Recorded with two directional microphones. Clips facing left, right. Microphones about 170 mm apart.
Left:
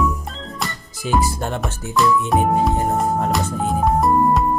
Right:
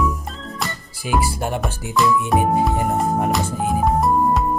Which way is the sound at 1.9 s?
Centre (ahead or behind).